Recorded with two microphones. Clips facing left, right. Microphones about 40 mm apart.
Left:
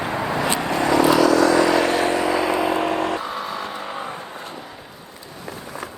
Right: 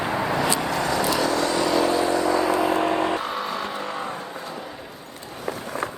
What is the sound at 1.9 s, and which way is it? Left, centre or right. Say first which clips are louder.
Vehicle: left 2 dB; left.